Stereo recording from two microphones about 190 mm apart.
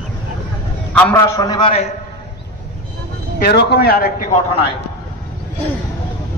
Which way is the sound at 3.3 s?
55° left (ahead or behind).